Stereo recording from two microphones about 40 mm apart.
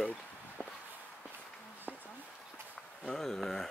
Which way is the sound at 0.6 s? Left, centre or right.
Left.